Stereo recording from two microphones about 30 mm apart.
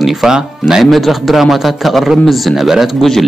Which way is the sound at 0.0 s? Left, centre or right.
Centre.